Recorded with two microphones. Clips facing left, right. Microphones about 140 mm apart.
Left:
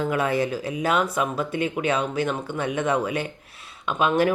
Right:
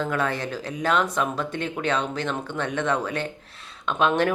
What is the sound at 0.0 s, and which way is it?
Speech, 10° left (ahead or behind).